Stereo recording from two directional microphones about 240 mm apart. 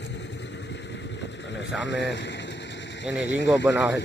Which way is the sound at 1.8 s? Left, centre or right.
Left.